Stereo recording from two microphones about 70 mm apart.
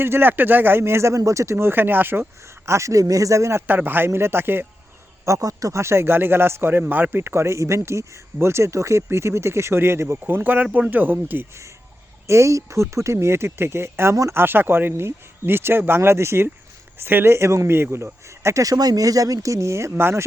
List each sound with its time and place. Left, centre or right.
0.0 s speech: right
2.6 s speech: right
3.7 s speech: right
5.2 s speech: right
12.3 s speech: right
20.0 s speech: right